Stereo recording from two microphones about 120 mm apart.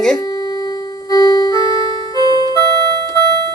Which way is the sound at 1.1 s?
30° left (ahead or behind).